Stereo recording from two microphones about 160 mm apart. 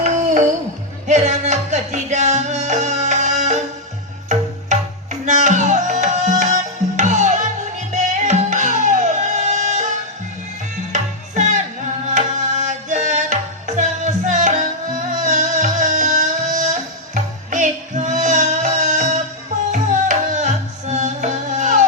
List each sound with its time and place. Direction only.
0.0 s music: 50° right (ahead or behind)
5.2 s music: 50° right (ahead or behind)